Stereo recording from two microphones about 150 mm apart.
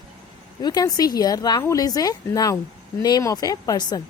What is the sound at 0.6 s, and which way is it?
A woman's voice, 25° left (ahead or behind).